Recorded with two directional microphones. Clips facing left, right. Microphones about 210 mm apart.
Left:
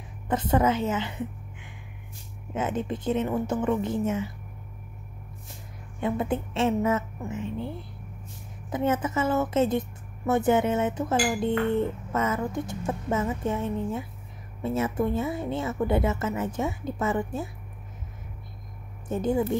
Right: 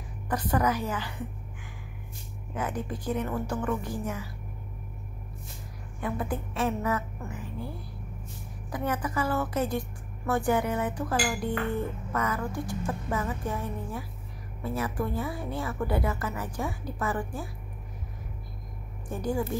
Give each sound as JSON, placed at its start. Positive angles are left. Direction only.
{"t": 0.3, "sound": "a woman's voice", "side_deg": 25}
{"t": 5.9, "sound": "a woman's voice", "side_deg": 25}
{"t": 19.0, "sound": "a woman's voice", "side_deg": 20}